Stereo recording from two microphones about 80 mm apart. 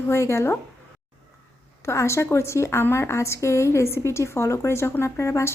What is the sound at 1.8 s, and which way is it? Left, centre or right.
A woman's voice, left.